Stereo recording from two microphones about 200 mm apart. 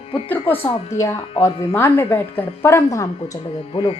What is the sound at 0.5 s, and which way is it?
Music, 30° left (ahead or behind).